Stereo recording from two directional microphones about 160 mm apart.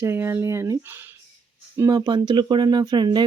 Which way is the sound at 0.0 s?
15° right (ahead or behind).